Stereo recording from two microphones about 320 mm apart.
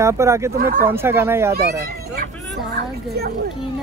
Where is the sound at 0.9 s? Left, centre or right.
Centre.